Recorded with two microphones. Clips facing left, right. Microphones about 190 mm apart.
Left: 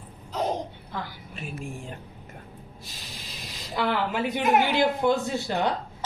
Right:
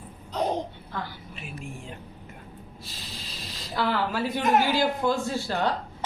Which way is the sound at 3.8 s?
20° left (ahead or behind).